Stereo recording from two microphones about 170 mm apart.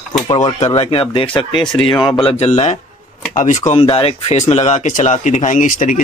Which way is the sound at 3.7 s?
35° left (ahead or behind).